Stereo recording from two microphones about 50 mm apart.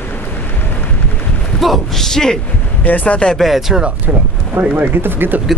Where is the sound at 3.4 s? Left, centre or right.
Centre.